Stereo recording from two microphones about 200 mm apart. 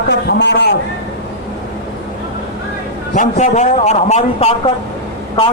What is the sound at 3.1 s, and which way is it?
A man's voice, 40° left (ahead or behind).